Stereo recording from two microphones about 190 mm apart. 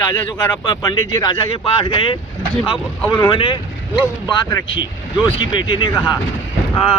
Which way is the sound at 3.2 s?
25° left (ahead or behind).